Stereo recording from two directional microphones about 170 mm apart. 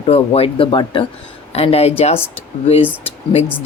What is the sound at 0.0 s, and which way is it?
Speech, 35° left (ahead or behind).